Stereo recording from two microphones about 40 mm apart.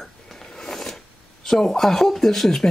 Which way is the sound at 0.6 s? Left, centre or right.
Centre.